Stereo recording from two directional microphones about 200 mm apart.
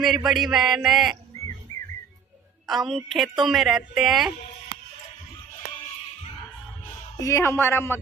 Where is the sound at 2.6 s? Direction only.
Centre (ahead or behind).